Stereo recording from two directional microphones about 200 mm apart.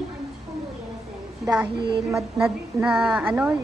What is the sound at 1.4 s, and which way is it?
A woman's voice, 5° right (ahead or behind).